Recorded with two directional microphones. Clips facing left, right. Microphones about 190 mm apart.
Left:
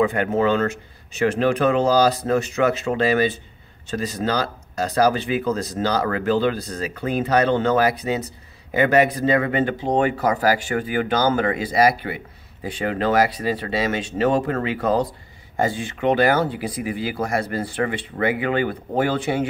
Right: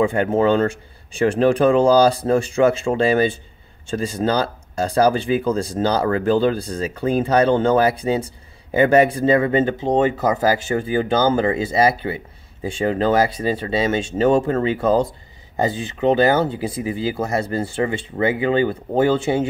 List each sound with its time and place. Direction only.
0.0 s speech: 30° right (ahead or behind)